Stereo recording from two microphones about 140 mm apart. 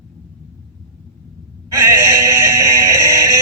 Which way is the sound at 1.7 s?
20° right (ahead or behind).